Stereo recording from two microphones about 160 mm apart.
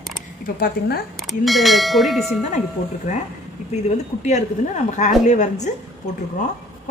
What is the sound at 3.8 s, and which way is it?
A woman's voice, 45° left (ahead or behind).